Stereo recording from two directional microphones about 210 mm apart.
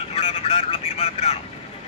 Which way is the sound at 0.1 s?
30° left (ahead or behind).